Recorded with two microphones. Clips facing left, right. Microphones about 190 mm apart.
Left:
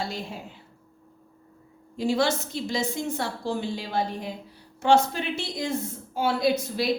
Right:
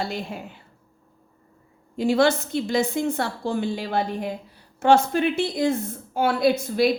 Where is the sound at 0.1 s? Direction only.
60° right (ahead or behind).